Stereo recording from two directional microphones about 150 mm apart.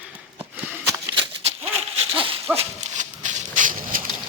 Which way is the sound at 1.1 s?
40° right (ahead or behind).